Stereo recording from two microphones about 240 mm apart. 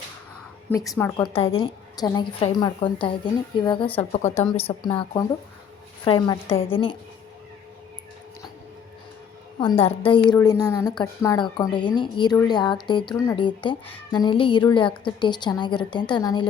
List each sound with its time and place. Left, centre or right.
0.9 s a woman's voice: centre
1.3 s a woman's voice: left
4.5 s a woman's voice: centre
4.9 s a woman's voice: centre
9.6 s a woman's voice: left